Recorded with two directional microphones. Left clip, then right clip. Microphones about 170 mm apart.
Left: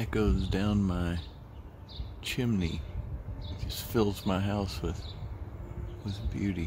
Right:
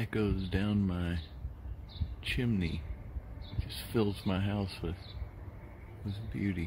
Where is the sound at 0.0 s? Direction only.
Centre (ahead or behind).